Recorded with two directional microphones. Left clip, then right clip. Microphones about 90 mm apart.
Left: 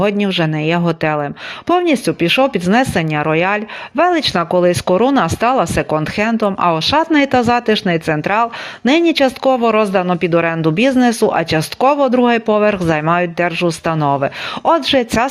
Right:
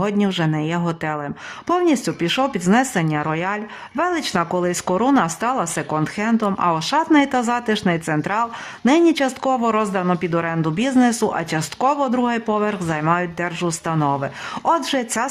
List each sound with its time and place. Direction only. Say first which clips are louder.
0.0 s speech: left 6 dB; 20° left (ahead or behind)
1.6 s speech: left 5 dB; 20° left (ahead or behind)